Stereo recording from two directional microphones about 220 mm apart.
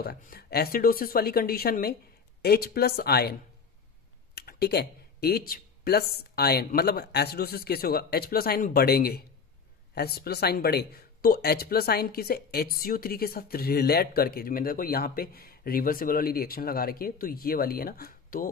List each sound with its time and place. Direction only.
0.0 s speech: 45° left (ahead or behind)
4.4 s speech: 45° left (ahead or behind)